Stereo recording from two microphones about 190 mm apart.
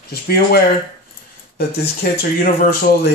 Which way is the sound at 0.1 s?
55° left (ahead or behind).